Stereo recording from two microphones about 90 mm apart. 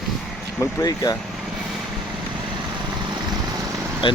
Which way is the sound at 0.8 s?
45° left (ahead or behind).